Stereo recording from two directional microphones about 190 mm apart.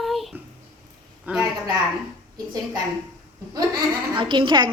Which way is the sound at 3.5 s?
20° right (ahead or behind).